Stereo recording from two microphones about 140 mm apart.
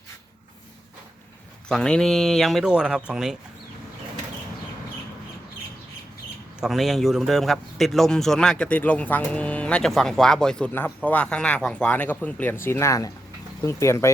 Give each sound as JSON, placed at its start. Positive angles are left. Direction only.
{"t": 1.6, "sound": "speech", "side_deg": 5}
{"t": 6.6, "sound": "speech", "side_deg": 0}